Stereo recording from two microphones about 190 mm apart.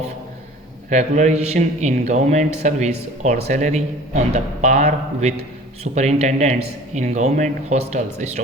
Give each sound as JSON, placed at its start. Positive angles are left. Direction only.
{"t": 0.9, "sound": "a man's voice", "side_deg": -40}